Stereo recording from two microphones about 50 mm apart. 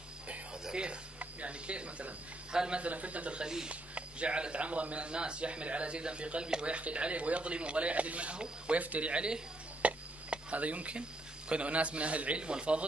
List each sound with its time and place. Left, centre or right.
0.7 s a man's voice: centre
2.8 s a man's voice: right